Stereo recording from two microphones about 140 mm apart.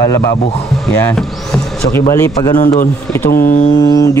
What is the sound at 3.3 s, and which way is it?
Speech, 90° left.